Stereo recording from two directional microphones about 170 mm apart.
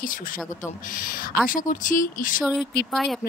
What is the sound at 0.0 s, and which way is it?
Speech, 55° left (ahead or behind).